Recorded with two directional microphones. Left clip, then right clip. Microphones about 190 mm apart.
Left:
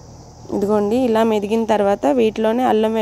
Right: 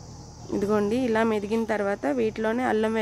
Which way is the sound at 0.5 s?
10° left (ahead or behind).